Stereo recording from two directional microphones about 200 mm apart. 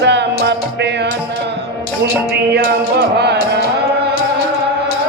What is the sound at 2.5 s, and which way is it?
Music, 55° right (ahead or behind).